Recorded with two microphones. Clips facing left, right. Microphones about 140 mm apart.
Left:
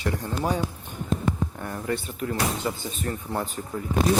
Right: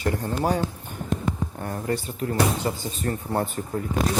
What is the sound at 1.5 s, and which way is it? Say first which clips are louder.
Speech: right 2 dB; 35° right (ahead or behind).